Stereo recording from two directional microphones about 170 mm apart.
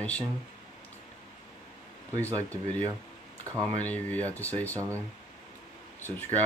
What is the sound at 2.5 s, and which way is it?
Speech, 10° left (ahead or behind).